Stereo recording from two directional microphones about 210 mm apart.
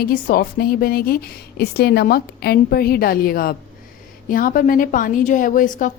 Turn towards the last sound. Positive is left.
turn(degrees=40)  # may be behind; listen again after turning